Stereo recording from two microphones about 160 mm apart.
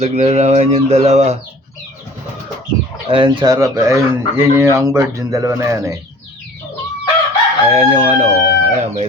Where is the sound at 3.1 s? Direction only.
30° right (ahead or behind).